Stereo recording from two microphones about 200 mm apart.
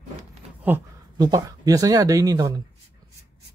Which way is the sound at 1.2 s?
20° right (ahead or behind).